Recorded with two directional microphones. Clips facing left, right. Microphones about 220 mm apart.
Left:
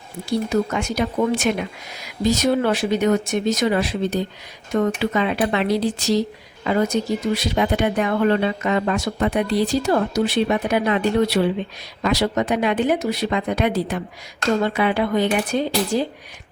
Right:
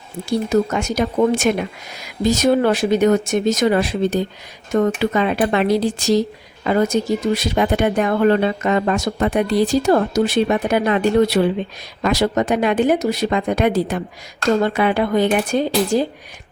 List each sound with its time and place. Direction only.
0.3 s speech: 45° right (ahead or behind)